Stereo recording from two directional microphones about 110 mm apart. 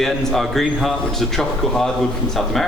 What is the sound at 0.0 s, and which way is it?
A man's voice, centre (ahead or behind).